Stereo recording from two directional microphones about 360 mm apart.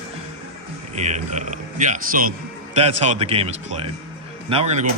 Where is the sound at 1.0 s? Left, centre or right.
Centre.